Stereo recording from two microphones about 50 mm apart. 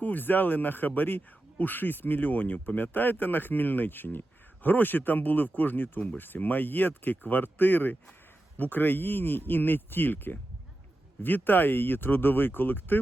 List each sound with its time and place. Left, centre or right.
0.0 s a man's voice: left